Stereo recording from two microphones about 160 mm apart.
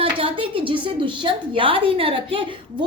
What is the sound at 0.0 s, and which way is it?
A woman's voice, 35° right (ahead or behind).